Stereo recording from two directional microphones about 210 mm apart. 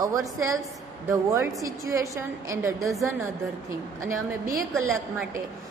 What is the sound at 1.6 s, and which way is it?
A woman's voice, 15° right (ahead or behind).